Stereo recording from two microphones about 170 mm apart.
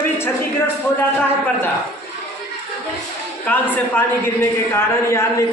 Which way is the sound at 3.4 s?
10° left (ahead or behind).